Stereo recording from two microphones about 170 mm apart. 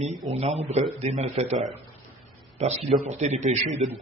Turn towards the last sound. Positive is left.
turn(degrees=-40)  # may be behind; listen again after turning